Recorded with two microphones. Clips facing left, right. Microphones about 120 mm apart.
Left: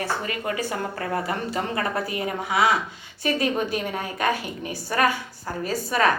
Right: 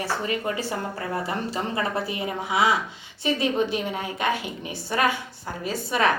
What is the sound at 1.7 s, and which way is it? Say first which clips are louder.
A woman's voice: left 1 dB; 25° right (ahead or behind).